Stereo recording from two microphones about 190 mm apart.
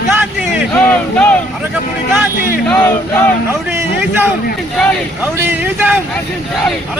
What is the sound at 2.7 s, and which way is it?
Speech, 10° left (ahead or behind).